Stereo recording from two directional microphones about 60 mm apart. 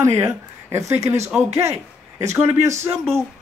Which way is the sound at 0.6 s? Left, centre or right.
Right.